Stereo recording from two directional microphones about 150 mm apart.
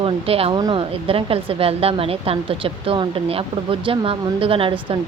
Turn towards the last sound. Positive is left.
turn(degrees=-35)  # may be behind; listen again after turning